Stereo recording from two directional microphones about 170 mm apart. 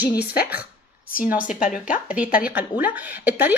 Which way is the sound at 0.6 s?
55° left (ahead or behind).